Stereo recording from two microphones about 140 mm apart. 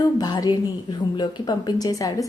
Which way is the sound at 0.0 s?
30° left (ahead or behind).